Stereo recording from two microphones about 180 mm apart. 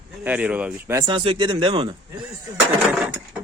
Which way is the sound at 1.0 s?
30° right (ahead or behind).